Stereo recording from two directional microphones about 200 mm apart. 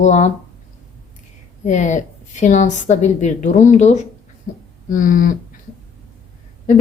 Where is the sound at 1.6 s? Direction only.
35° left (ahead or behind).